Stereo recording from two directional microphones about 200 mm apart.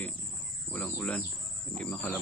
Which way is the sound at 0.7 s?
5° left (ahead or behind).